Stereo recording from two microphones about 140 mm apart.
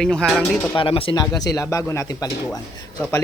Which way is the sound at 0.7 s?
40° left (ahead or behind).